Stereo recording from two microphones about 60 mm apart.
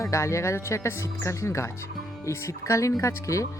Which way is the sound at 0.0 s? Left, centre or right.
Left.